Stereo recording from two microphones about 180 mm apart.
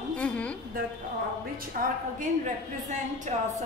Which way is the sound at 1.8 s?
45° right (ahead or behind).